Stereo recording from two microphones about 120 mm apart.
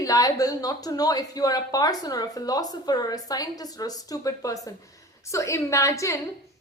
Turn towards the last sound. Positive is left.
turn(degrees=25)  # may be behind; listen again after turning